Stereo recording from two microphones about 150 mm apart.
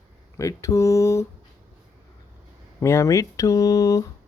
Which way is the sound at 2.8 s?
20° left (ahead or behind).